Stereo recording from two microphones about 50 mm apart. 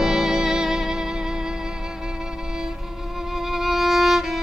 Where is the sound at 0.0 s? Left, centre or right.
Centre.